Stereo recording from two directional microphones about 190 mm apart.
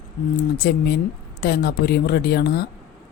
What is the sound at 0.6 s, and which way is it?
Speech, 60° left (ahead or behind).